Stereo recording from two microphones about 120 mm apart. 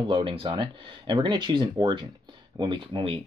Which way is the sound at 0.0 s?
45° right (ahead or behind).